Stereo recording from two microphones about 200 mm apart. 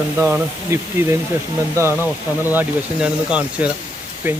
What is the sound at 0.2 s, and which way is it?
Speech, 10° right (ahead or behind).